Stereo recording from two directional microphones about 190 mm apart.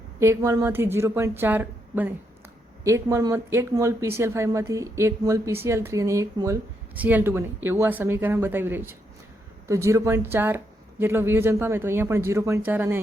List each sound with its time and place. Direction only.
0.2 s speech: 15° right (ahead or behind)